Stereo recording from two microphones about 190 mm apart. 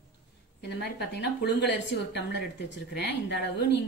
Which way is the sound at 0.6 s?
65° left (ahead or behind).